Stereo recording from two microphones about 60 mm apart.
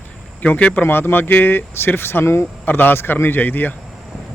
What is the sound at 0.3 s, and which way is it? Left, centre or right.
Speech, left.